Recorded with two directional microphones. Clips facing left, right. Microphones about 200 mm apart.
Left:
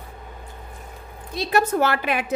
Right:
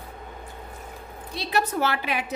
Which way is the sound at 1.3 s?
50° left (ahead or behind).